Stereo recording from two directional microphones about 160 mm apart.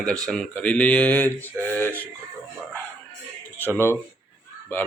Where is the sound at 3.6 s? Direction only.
15° left (ahead or behind).